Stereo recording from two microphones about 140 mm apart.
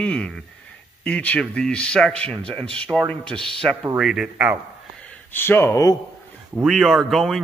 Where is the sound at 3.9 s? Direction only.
5° right (ahead or behind).